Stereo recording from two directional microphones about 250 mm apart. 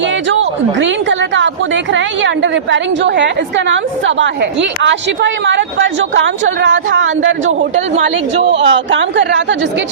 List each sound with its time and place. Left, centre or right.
0.8 s a woman's voice: right